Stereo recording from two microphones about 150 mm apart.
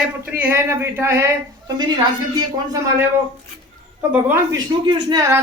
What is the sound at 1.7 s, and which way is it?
Speech, 30° right (ahead or behind).